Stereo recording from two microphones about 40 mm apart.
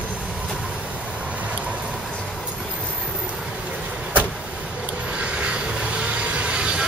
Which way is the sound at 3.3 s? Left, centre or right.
Centre.